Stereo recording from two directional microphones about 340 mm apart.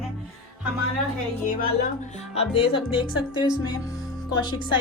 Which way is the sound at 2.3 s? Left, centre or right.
Centre.